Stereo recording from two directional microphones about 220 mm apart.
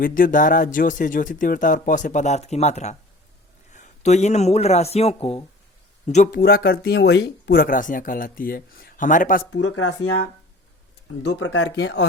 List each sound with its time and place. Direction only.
0.0 s a man's voice: 40° left (ahead or behind)
6.4 s speech: 45° left (ahead or behind)
9.5 s speech: 60° left (ahead or behind)
11.3 s speech: 60° left (ahead or behind)